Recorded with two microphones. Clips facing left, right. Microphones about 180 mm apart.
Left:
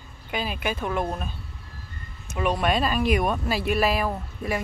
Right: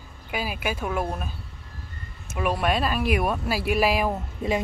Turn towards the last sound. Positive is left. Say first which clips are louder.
# right 3 dB
turn(degrees=-20)  # may be behind; listen again after turning